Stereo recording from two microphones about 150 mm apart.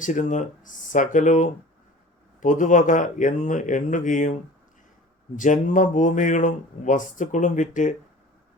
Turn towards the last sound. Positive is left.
turn(degrees=60)  # may be behind; listen again after turning